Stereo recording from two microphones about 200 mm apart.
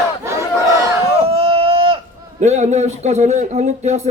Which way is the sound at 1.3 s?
30° right (ahead or behind).